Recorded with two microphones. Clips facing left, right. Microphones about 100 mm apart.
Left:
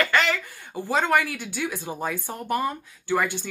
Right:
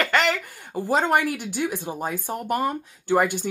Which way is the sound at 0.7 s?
35° right (ahead or behind).